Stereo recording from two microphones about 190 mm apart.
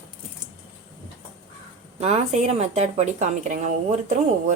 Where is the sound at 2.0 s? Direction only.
35° right (ahead or behind).